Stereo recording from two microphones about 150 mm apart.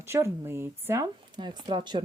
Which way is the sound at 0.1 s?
15° right (ahead or behind).